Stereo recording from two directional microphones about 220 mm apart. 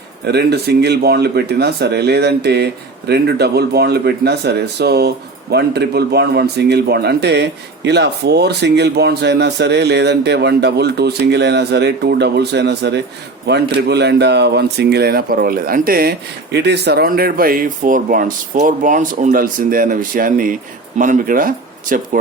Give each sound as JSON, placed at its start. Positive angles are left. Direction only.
{"t": 0.3, "sound": "speech", "side_deg": -50}